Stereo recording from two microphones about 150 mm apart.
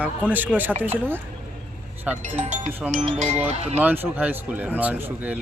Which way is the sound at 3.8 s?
10° right (ahead or behind).